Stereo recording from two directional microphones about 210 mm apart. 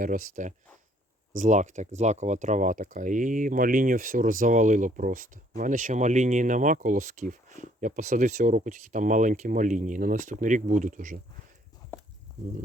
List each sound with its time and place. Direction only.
0.0 s speech: 40° right (ahead or behind)